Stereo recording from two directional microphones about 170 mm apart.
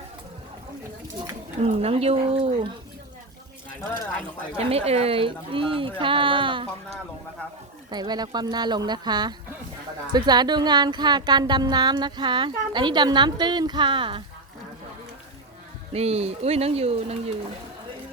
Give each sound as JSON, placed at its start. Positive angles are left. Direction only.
{"t": 1.6, "sound": "speech", "side_deg": -35}
{"t": 4.5, "sound": "speech", "side_deg": -35}
{"t": 7.9, "sound": "a woman's voice", "side_deg": -25}
{"t": 15.9, "sound": "speech", "side_deg": -40}